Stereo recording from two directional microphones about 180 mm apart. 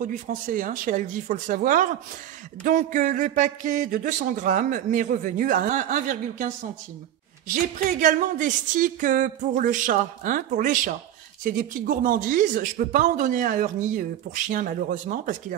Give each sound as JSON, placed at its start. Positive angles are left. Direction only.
{"t": 0.0, "sound": "speech", "side_deg": -50}
{"t": 8.0, "sound": "speech", "side_deg": -45}